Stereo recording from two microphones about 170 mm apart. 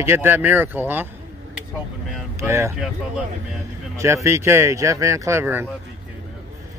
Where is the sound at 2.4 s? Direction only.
15° right (ahead or behind).